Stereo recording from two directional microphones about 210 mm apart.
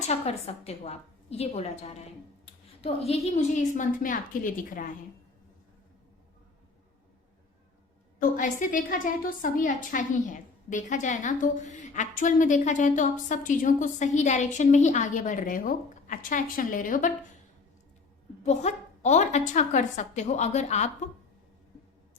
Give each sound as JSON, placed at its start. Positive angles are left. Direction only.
{"t": 0.0, "sound": "a woman's voice", "side_deg": 30}
{"t": 8.2, "sound": "a woman's voice", "side_deg": 40}
{"t": 18.4, "sound": "a woman's voice", "side_deg": 35}